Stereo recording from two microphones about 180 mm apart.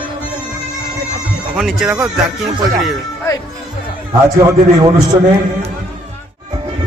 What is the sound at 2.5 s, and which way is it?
Speech, 20° right (ahead or behind).